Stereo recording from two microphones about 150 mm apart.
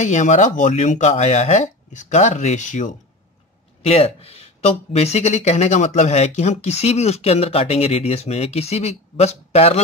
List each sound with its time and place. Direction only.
0.0 s speech: 50° left (ahead or behind)
3.8 s speech: 45° left (ahead or behind)